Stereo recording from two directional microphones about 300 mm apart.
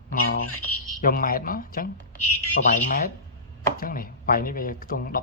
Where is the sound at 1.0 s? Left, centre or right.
Left.